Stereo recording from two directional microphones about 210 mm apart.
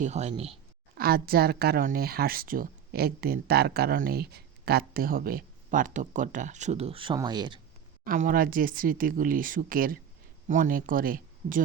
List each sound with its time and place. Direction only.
0.0 s speech: 30° right (ahead or behind)
0.9 s speech: 45° right (ahead or behind); by 7.6 s 20° right (ahead or behind)
8.0 s speech: 40° right (ahead or behind)